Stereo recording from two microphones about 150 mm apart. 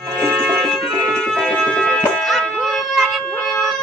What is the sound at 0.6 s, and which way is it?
Music, centre (ahead or behind).